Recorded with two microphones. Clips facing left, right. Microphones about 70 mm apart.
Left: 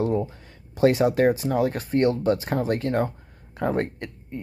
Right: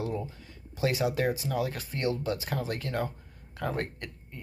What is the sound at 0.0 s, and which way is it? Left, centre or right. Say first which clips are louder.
Speech: left 9 dB; left.